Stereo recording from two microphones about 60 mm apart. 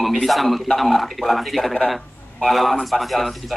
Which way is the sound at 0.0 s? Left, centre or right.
Centre.